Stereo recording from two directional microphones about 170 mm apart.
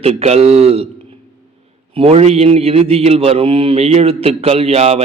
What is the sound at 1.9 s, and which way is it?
A man's voice, 35° right (ahead or behind).